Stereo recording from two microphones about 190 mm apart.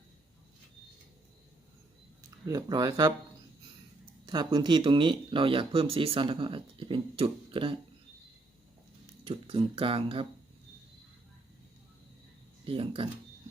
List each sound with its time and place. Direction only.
2.5 s speech: 20° right (ahead or behind)
4.3 s speech: 25° right (ahead or behind)
9.2 s speech: 30° right (ahead or behind)
12.6 s speech: 30° right (ahead or behind)